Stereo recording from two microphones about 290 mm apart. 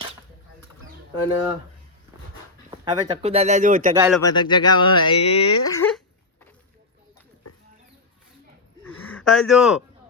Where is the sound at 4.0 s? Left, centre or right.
Centre.